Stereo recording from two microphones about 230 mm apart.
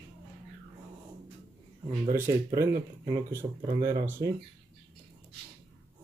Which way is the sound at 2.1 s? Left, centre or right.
Centre.